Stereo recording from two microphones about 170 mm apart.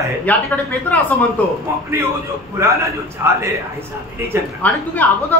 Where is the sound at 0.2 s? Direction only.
10° left (ahead or behind).